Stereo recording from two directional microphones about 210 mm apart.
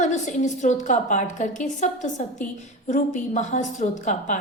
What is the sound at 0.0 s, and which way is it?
A woman's voice, 35° left (ahead or behind).